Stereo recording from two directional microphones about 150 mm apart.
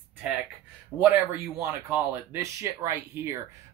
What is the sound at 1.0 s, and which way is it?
Speech, 15° right (ahead or behind).